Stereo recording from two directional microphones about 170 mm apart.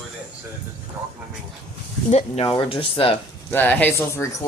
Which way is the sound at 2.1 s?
40° left (ahead or behind).